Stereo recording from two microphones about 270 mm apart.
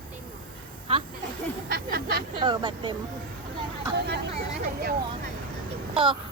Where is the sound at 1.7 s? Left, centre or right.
Right.